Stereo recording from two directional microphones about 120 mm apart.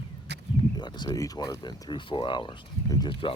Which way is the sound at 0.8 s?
40° left (ahead or behind).